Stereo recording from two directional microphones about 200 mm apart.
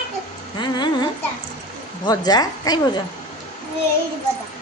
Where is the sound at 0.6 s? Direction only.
20° left (ahead or behind).